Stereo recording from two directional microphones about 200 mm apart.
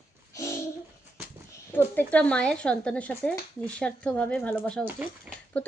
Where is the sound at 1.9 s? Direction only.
5° left (ahead or behind).